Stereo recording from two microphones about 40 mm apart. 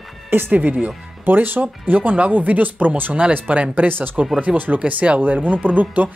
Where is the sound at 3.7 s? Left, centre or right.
Right.